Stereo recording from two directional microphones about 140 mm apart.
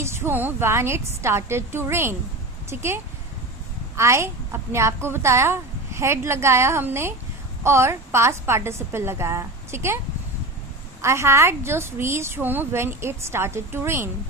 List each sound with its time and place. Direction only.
0.0 s a woman's voice: 15° right (ahead or behind)
11.0 s a woman's voice: 20° right (ahead or behind)